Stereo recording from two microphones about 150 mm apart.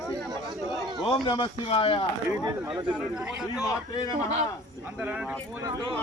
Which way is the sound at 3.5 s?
25° left (ahead or behind).